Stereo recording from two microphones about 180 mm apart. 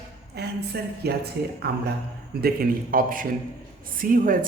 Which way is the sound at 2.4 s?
55° right (ahead or behind).